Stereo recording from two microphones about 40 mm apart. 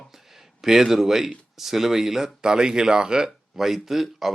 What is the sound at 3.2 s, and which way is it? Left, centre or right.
Speech, centre.